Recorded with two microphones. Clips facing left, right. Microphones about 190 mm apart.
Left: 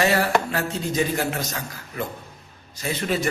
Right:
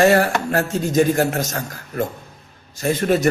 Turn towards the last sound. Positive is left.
turn(degrees=-50)  # may be behind; listen again after turning